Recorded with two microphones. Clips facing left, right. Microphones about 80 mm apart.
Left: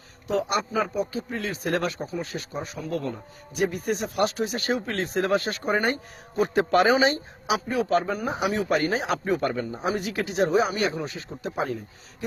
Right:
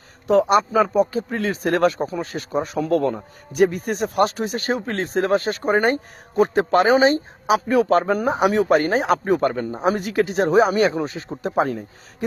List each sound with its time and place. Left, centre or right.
0.3 s speech: right
11.0 s speech: right